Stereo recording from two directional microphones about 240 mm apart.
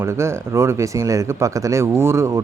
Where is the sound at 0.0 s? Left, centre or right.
Centre.